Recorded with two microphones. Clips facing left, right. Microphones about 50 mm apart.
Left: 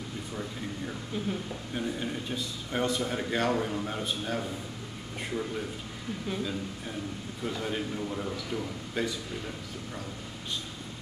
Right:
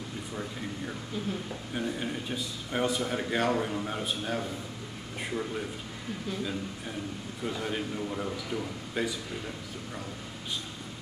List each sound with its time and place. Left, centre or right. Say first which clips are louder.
1.7 s a man's voice: even; centre
7.4 s a man's voice: even; centre